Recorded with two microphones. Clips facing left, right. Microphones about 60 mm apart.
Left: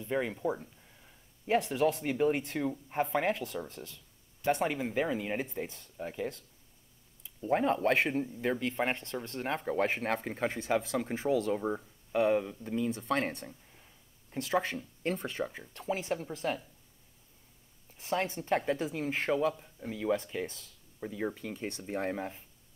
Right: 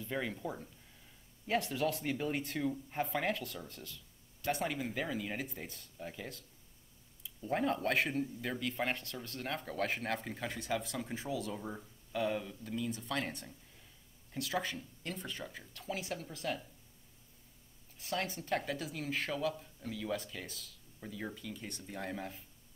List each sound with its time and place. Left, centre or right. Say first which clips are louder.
0.0 s speech: left 6 dB; centre; by 15.5 s left
15.5 s speech: left 6 dB; left
17.9 s speech: left 5 dB; left